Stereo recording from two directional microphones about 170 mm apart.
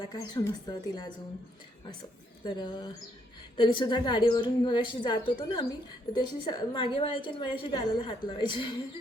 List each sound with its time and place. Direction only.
0.0 s a woman's voice: 20° left (ahead or behind)